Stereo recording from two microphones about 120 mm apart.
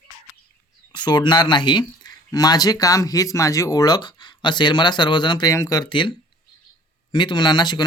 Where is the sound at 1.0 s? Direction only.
35° left (ahead or behind).